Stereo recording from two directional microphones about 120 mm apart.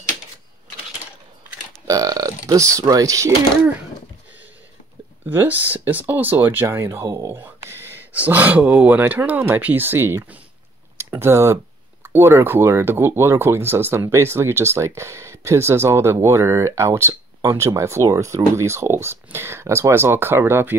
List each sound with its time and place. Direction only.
1.9 s burping: 30° right (ahead or behind)
5.3 s speech: 15° right (ahead or behind)